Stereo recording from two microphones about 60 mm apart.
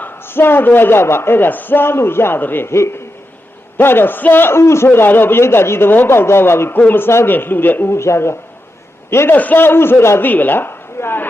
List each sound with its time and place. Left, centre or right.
0.0 s a man's voice: left
2.7 s a man's voice: left
3.8 s a man's voice: left
4.9 s a man's voice: left
7.9 s a man's voice: left
9.3 s a man's voice: left
10.2 s speech: left